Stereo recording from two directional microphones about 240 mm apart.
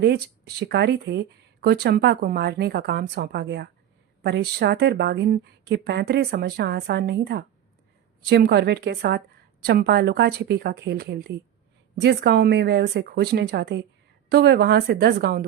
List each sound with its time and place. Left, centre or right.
0.6 s a woman's voice: right